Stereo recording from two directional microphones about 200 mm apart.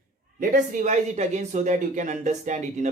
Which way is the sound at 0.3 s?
40° right (ahead or behind).